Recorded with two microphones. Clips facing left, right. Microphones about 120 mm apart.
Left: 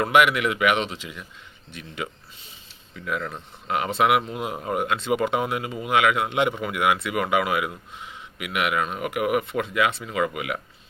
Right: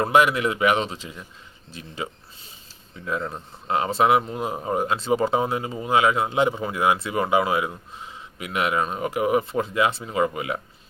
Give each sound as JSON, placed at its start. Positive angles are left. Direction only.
{"t": 0.0, "sound": "speech", "side_deg": -30}